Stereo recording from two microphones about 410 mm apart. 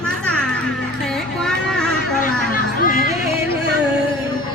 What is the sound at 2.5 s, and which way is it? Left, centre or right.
Music, centre.